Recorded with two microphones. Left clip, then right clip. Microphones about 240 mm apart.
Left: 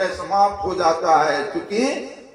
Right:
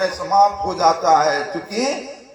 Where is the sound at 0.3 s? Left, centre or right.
Right.